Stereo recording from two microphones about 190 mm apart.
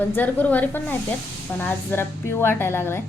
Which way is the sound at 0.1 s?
10° left (ahead or behind).